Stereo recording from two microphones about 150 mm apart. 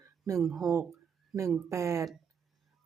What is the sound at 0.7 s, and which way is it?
Speech, 20° right (ahead or behind).